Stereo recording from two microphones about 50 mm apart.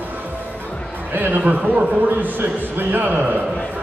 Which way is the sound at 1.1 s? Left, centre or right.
Right.